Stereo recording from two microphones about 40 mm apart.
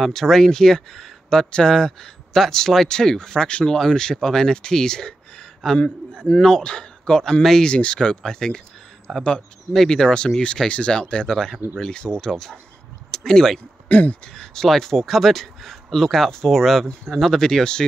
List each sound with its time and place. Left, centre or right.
0.0 s speech: centre
5.8 s a man's voice: left; by 9.2 s centre
9.8 s speech: centre
13.8 s speech: left
14.3 s speech: centre